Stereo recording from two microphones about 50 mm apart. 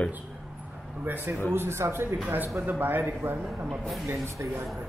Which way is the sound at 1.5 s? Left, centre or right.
Right.